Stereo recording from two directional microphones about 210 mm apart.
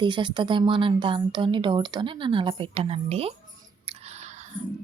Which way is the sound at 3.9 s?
30° right (ahead or behind).